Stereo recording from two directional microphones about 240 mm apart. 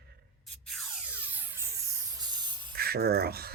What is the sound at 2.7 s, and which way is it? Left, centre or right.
Speech, right.